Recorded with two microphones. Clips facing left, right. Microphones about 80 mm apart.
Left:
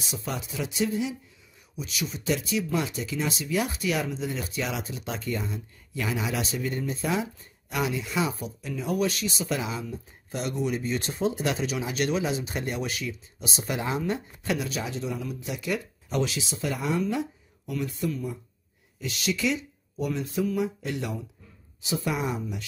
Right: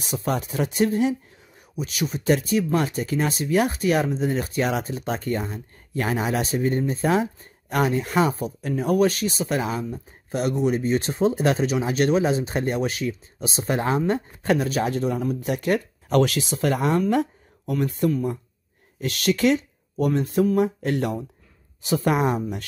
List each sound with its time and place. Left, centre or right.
0.0 s speech: right